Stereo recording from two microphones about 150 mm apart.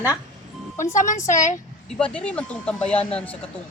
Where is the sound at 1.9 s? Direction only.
5° left (ahead or behind).